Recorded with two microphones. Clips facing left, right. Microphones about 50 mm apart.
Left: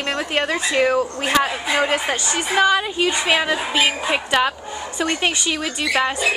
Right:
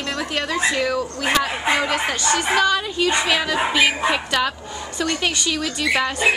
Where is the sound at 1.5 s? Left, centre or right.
Right.